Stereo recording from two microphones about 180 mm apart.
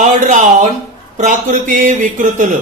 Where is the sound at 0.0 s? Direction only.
45° right (ahead or behind).